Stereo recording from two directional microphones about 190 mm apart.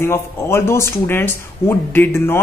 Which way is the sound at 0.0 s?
15° left (ahead or behind).